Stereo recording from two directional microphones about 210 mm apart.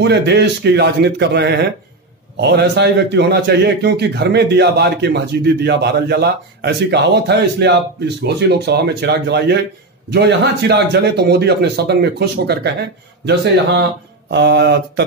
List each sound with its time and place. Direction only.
0.0 s a man's voice: 50° right (ahead or behind)